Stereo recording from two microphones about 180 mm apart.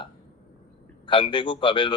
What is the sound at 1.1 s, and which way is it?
Speech, 25° left (ahead or behind).